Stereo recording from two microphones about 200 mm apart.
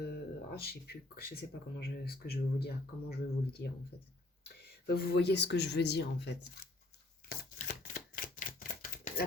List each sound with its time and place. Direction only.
0.1 s speech: 50° left (ahead or behind)
7.3 s typewriter: 50° left (ahead or behind)